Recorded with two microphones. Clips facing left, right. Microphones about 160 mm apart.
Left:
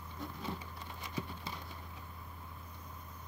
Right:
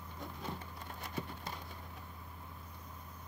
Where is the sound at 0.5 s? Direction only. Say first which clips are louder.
Even; 50° right (ahead or behind).